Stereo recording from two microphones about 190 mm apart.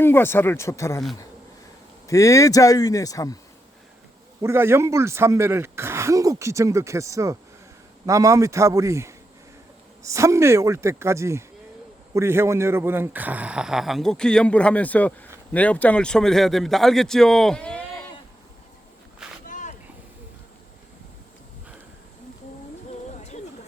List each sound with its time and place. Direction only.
0.0 s speech: 10° left (ahead or behind)
2.0 s speech: 15° left (ahead or behind)
4.4 s speech: 15° right (ahead or behind); by 17.8 s 5° left (ahead or behind)
19.5 s vehicle: 40° left (ahead or behind)